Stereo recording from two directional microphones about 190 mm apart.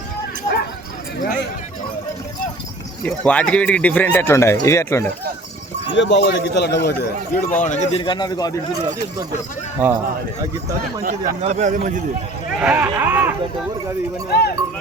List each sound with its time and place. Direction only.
3.2 s speech: 5° left (ahead or behind)
5.9 s a man's voice: 70° left (ahead or behind)
6.8 s a man's voice: 55° left (ahead or behind); by 8.5 s 20° left (ahead or behind)
9.8 s speech: 10° right (ahead or behind)
11.0 s a man's voice: 45° right (ahead or behind)
12.5 s speech: 5° right (ahead or behind)
14.3 s a man's voice: 60° left (ahead or behind)